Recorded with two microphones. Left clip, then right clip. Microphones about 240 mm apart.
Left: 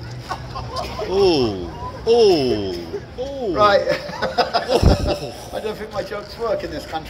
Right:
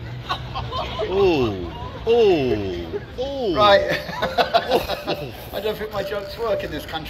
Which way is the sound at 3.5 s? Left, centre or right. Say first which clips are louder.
Even; right.